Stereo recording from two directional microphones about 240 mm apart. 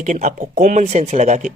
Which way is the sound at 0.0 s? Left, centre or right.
Right.